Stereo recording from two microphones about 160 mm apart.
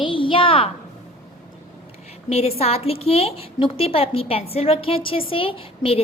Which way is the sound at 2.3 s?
40° left (ahead or behind).